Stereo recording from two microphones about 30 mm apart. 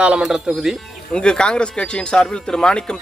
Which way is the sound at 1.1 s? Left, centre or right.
Left.